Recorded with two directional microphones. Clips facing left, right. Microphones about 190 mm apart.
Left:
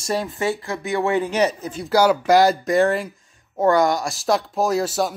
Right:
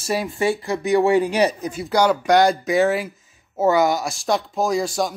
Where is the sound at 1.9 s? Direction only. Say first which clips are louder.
Left 1 dB; 5° left (ahead or behind).